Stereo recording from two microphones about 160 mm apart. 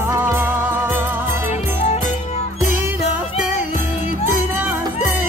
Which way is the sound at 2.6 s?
10° right (ahead or behind).